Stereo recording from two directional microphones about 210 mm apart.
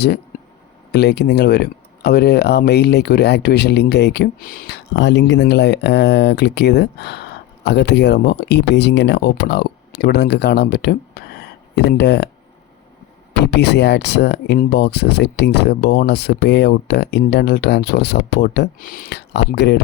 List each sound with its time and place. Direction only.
0.9 s speech: 50° left (ahead or behind)
4.9 s speech: 60° left (ahead or behind)
13.4 s speech: 55° left (ahead or behind)